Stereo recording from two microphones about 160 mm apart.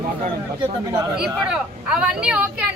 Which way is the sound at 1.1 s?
5° right (ahead or behind).